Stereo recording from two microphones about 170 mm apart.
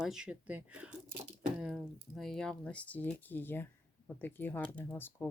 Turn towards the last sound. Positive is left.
turn(degrees=10)  # may be behind; listen again after turning